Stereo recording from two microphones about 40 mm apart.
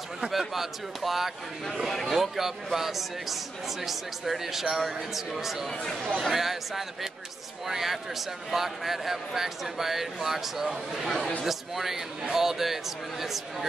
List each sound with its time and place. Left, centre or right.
0.2 s a man's voice: centre
5.7 s speech: centre
6.3 s a man's voice: centre